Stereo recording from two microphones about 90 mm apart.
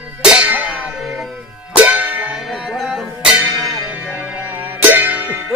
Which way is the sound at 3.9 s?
15° right (ahead or behind).